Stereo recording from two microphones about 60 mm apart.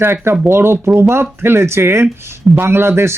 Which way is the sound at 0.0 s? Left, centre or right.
Right.